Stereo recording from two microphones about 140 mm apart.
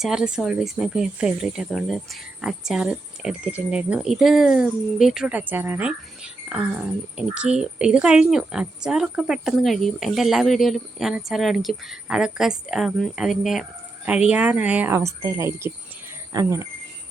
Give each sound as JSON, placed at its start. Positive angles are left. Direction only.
{"t": 0.0, "sound": "a woman's voice", "side_deg": -5}